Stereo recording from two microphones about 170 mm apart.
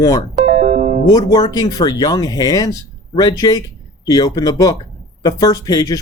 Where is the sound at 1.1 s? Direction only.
20° left (ahead or behind).